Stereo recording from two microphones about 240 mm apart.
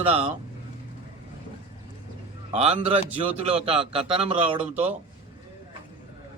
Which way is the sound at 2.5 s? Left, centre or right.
Right.